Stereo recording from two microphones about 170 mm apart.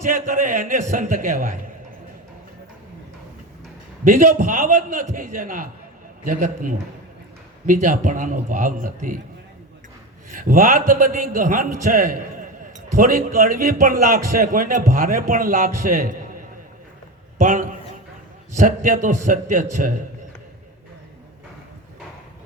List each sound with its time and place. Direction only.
0.0 s a man's voice: 50° right (ahead or behind)
4.0 s a man's voice: 50° right (ahead or behind)
10.2 s a man's voice: 55° right (ahead or behind)
17.4 s a man's voice: 50° right (ahead or behind)